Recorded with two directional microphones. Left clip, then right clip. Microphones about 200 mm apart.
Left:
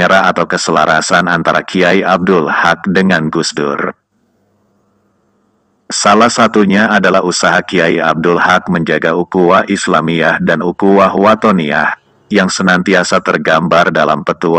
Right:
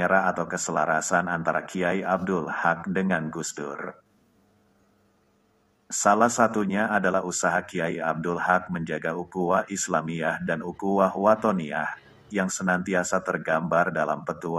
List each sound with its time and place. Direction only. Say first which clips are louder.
0.0 s speech: left 14 dB; 40° left (ahead or behind)
5.9 s speech: left 12 dB; 40° left (ahead or behind)